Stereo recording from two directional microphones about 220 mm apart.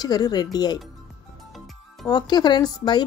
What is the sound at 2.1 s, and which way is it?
Speech, 20° left (ahead or behind).